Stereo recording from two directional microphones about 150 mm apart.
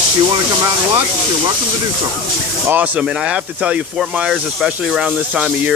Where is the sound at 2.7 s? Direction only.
10° right (ahead or behind).